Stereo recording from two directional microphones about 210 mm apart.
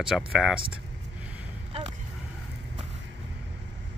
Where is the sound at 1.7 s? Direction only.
25° right (ahead or behind).